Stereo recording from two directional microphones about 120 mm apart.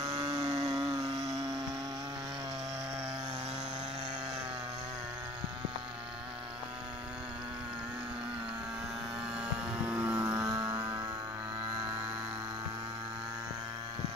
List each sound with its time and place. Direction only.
0.0 s chainsaw: 35° right (ahead or behind)
0.4 s chainsaw: 70° right (ahead or behind)
0.7 s chainsaw: 30° right (ahead or behind)
9.4 s a sound: 10° right (ahead or behind)
10.1 s vehicle: 30° right (ahead or behind)